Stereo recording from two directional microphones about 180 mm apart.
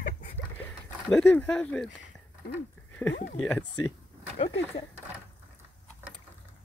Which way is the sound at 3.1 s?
65° left (ahead or behind).